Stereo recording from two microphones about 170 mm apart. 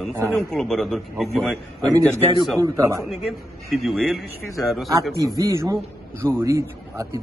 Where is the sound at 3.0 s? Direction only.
Centre (ahead or behind).